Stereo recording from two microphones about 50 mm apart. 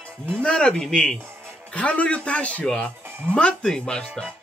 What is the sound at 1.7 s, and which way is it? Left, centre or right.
Speech, left.